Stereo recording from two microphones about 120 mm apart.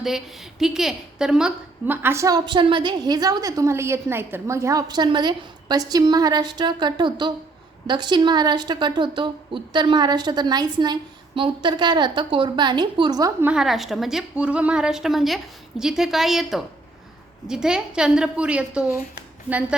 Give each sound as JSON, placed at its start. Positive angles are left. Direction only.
{"t": 0.0, "sound": "a woman's voice", "side_deg": -5}
{"t": 2.0, "sound": "a woman's voice", "side_deg": -20}
{"t": 2.2, "sound": "a woman's voice", "side_deg": -35}
{"t": 13.4, "sound": "a woman's voice", "side_deg": -5}